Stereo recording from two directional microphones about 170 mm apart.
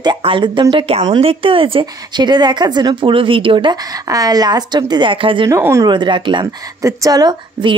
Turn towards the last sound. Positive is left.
turn(degrees=-25)  # may be behind; listen again after turning